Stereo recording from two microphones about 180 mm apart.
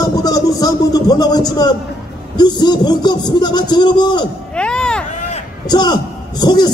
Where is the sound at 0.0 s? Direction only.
20° left (ahead or behind).